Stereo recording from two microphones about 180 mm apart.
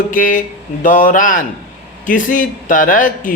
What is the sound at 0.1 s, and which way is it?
Speech, 50° left (ahead or behind).